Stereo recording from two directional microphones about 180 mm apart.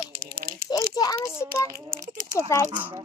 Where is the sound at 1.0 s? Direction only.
20° left (ahead or behind).